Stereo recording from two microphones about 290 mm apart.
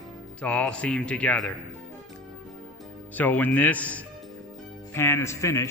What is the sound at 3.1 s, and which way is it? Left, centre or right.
Speech, centre.